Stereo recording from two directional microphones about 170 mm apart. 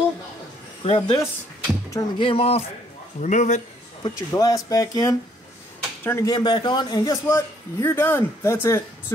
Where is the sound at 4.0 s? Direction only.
20° left (ahead or behind).